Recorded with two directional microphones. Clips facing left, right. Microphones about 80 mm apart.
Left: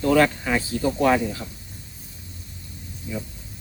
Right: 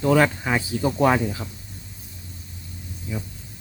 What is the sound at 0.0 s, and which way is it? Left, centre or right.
Speech, centre.